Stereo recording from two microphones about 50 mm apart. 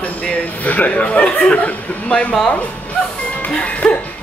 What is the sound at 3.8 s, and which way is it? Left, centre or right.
Speech, centre.